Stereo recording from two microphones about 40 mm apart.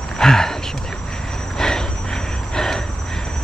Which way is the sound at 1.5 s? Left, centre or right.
Centre.